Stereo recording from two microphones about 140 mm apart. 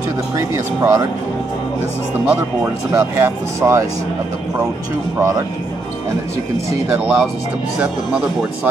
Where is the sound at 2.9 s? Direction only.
20° right (ahead or behind).